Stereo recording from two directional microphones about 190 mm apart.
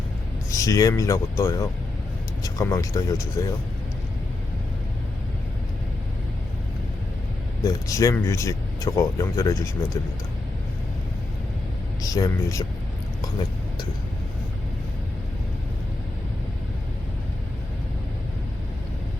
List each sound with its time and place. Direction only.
0.5 s speech: 15° left (ahead or behind)
7.6 s speech: 20° left (ahead or behind)
12.0 s speech: 20° left (ahead or behind)